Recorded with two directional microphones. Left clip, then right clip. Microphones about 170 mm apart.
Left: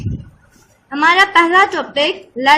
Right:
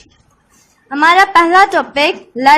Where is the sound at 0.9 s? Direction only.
20° right (ahead or behind).